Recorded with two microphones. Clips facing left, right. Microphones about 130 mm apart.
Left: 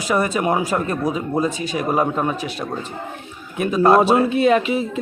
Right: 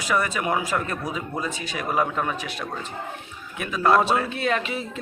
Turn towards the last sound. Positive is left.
turn(degrees=10)  # may be behind; listen again after turning